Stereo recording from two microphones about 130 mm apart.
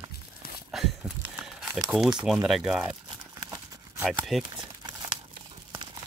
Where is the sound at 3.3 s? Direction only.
30° right (ahead or behind).